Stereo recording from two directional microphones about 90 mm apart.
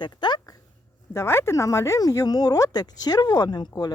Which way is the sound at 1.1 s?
30° left (ahead or behind).